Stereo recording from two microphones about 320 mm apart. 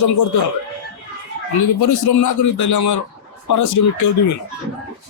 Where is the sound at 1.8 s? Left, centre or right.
Left.